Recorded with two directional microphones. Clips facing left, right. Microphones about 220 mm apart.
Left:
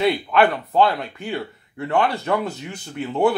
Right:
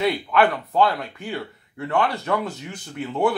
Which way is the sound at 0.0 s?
25° left (ahead or behind).